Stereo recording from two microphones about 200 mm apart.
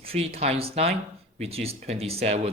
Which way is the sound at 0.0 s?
30° right (ahead or behind).